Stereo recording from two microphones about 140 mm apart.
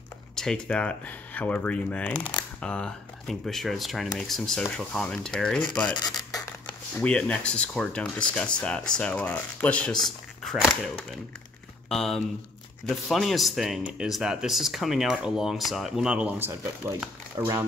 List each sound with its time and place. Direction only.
0.4 s speech: 5° left (ahead or behind)
5.9 s speech: 30° left (ahead or behind)
7.0 s speech: 10° left (ahead or behind); by 16.9 s 15° right (ahead or behind)